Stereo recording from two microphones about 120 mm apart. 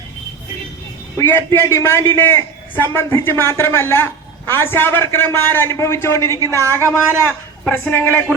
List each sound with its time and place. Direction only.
1.2 s a man's voice: 20° left (ahead or behind)
6.5 s speech: 25° right (ahead or behind)
7.3 s a woman's voice: 10° left (ahead or behind)